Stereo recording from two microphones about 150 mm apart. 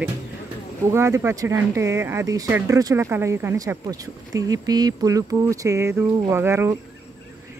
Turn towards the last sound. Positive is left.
turn(degrees=-15)  # may be behind; listen again after turning